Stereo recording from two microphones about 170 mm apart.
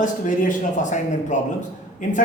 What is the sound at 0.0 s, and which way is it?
A man's voice, 50° left (ahead or behind).